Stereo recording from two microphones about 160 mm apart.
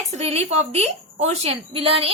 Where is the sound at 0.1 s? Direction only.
45° right (ahead or behind).